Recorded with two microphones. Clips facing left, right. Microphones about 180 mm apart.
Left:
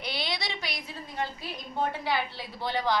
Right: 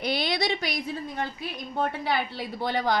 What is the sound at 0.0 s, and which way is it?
A woman's voice, 45° right (ahead or behind).